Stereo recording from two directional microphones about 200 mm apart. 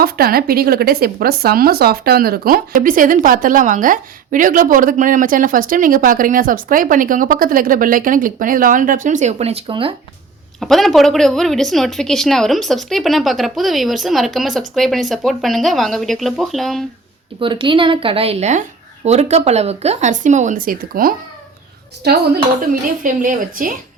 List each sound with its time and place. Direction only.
0.0 s speech: 50° right (ahead or behind); by 9.9 s 25° right (ahead or behind)
10.6 s a woman's voice: centre (ahead or behind)
17.4 s a woman's voice: 25° right (ahead or behind); by 23.7 s 45° right (ahead or behind)